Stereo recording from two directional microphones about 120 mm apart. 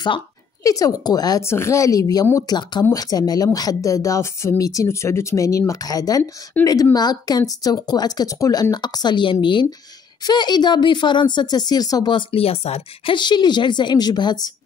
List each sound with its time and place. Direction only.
0.7 s speech: 30° left (ahead or behind)
1.4 s speech: 20° left (ahead or behind)